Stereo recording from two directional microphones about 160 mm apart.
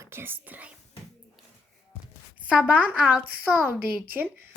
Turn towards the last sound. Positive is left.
turn(degrees=-10)  # may be behind; listen again after turning